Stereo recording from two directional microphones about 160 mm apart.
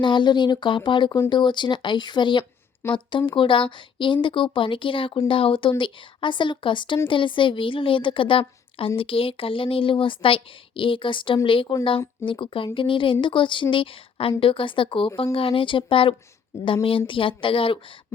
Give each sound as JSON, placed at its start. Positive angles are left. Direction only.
{"t": 0.0, "sound": "speech", "side_deg": 30}